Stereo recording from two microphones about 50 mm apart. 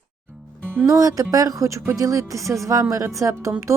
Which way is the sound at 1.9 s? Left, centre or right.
Right.